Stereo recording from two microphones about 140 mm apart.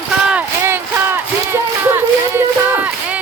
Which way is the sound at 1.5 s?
15° right (ahead or behind).